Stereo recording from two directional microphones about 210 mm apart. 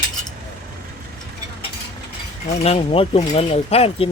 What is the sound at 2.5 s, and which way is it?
Speech, 30° left (ahead or behind).